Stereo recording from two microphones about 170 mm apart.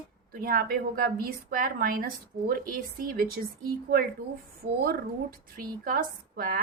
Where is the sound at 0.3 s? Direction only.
60° right (ahead or behind).